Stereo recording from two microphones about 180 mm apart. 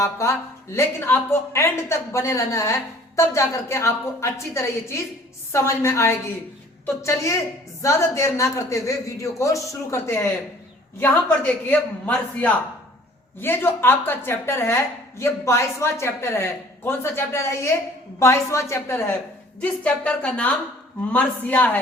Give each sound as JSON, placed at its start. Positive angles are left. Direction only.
{"t": 0.0, "sound": "speech", "side_deg": 15}